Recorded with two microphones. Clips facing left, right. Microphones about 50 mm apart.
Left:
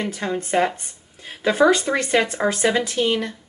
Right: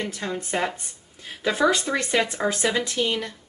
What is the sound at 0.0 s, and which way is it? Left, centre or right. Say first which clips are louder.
A woman's voice: left 4 dB; centre.